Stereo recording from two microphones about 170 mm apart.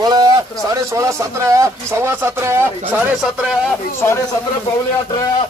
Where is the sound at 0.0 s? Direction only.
25° right (ahead or behind); by 3.7 s centre (ahead or behind).